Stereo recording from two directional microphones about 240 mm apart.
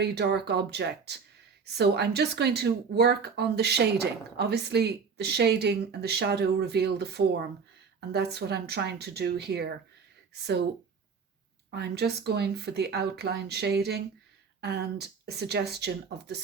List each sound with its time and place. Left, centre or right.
0.0 s speech: right
11.7 s speech: right